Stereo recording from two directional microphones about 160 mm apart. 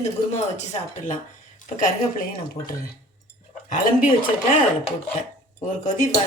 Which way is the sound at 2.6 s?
30° left (ahead or behind).